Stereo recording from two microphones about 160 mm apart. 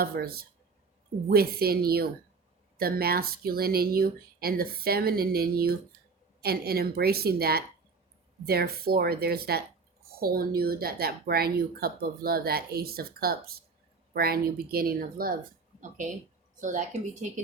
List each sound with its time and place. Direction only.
0.0 s speech: 70° right (ahead or behind)
16.6 s speech: 50° right (ahead or behind)